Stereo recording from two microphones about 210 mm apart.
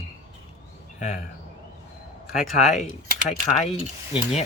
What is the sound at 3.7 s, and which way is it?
Stir, 30° left (ahead or behind).